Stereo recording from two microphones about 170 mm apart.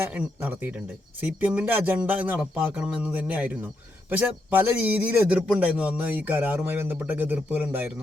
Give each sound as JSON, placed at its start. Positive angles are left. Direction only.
{"t": 0.0, "sound": "a man's voice", "side_deg": -10}